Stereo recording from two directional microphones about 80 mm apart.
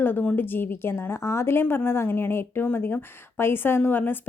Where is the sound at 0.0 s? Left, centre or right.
Left.